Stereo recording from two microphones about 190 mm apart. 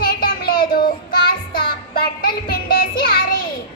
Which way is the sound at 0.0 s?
50° left (ahead or behind).